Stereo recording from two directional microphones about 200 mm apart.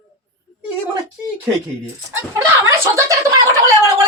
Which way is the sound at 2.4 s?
15° right (ahead or behind).